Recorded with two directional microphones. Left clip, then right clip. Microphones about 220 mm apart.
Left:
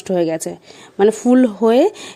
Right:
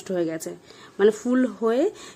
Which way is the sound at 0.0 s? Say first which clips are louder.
Left 9 dB; 30° left (ahead or behind).